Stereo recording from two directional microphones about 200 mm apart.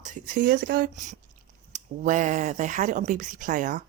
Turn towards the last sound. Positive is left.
turn(degrees=-40)  # may be behind; listen again after turning